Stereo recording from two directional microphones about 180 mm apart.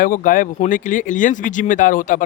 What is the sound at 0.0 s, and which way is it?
Speech, 50° left (ahead or behind).